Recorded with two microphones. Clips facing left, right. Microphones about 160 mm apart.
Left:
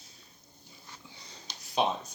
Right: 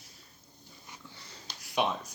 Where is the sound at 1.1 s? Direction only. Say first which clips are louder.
Even; 15° left (ahead or behind).